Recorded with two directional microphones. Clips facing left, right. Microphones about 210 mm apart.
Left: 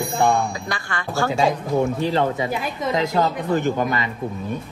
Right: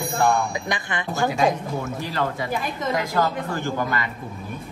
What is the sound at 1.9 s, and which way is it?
Speech, 20° left (ahead or behind).